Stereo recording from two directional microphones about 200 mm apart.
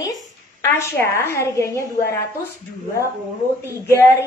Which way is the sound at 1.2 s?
10° left (ahead or behind).